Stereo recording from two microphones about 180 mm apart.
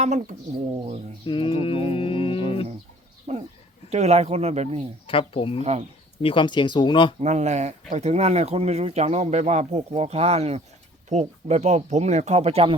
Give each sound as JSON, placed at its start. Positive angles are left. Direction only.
{"t": 1.2, "sound": "speech", "side_deg": 30}
{"t": 3.3, "sound": "speech", "side_deg": -35}
{"t": 5.0, "sound": "speech", "side_deg": 30}
{"t": 7.2, "sound": "speech", "side_deg": -40}